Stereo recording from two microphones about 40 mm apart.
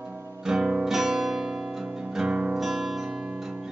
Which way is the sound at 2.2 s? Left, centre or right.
Right.